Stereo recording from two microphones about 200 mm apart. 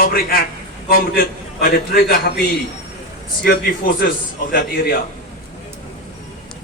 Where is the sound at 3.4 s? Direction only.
50° left (ahead or behind).